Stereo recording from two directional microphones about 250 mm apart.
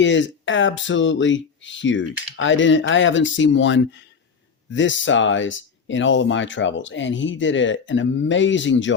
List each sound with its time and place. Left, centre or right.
0.0 s speech: left